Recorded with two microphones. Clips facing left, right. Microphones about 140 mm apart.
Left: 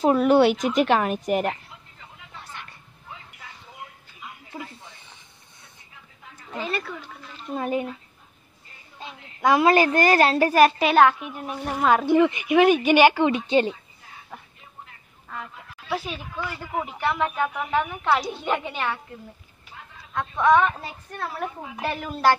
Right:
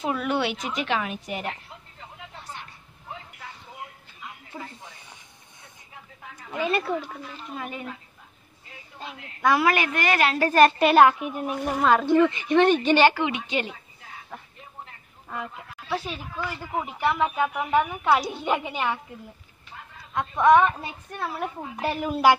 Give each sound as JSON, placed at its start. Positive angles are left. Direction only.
{"t": 0.0, "sound": "a woman's voice", "side_deg": 40}
{"t": 4.5, "sound": "speech", "side_deg": 5}
{"t": 7.5, "sound": "a woman's voice", "side_deg": 35}
{"t": 9.4, "sound": "a woman's voice", "side_deg": 20}
{"t": 10.5, "sound": "a woman's voice", "side_deg": 0}
{"t": 13.2, "sound": "a woman's voice", "side_deg": 35}
{"t": 15.9, "sound": "a woman's voice", "side_deg": 0}
{"t": 20.2, "sound": "a woman's voice", "side_deg": -15}